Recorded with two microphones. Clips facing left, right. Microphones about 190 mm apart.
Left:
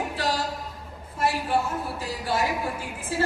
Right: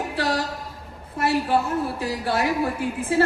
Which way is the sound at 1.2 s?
65° right (ahead or behind).